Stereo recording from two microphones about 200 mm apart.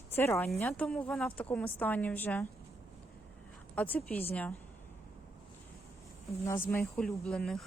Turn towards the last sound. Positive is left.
turn(degrees=0)  # may be behind; listen again after turning